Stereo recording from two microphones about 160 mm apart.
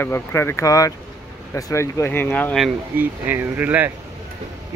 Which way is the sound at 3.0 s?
10° right (ahead or behind).